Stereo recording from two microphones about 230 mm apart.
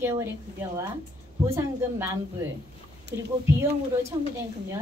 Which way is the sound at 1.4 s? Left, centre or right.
Centre.